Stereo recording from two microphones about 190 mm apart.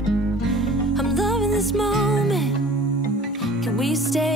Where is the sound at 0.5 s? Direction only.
Centre (ahead or behind).